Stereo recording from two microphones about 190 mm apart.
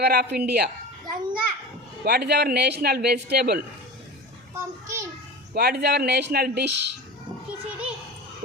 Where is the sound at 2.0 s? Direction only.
60° right (ahead or behind).